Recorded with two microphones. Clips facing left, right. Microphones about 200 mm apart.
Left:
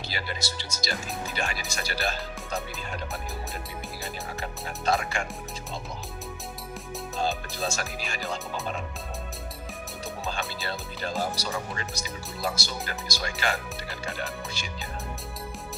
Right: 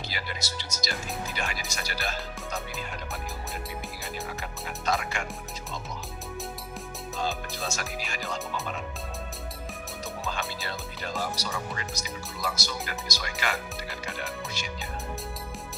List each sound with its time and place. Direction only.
0.1 s speech: 30° left (ahead or behind)
4.8 s speech: 30° left (ahead or behind)
7.6 s speech: 30° left (ahead or behind)
10.7 s speech: 30° left (ahead or behind)